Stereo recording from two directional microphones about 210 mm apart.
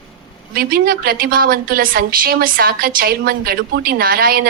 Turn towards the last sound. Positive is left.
turn(degrees=-45)  # may be behind; listen again after turning